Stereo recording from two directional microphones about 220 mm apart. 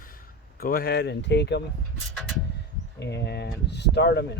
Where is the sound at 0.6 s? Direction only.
45° left (ahead or behind).